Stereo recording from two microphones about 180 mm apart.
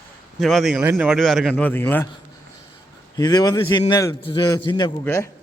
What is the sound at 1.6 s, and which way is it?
Speech, 10° left (ahead or behind).